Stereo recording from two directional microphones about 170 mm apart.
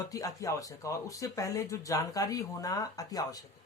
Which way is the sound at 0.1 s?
20° left (ahead or behind).